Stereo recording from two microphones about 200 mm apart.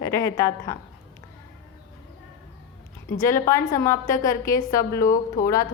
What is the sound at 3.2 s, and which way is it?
A woman's voice, 15° left (ahead or behind).